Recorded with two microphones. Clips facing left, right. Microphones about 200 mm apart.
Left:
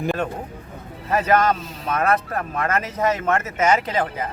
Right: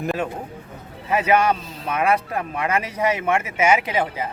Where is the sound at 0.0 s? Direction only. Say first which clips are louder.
Left 1 dB; centre (ahead or behind).